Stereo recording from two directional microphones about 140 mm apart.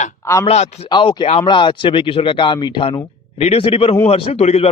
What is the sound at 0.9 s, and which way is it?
Speech, 35° left (ahead or behind).